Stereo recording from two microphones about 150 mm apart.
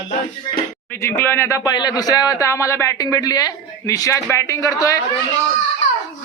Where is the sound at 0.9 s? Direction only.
15° left (ahead or behind).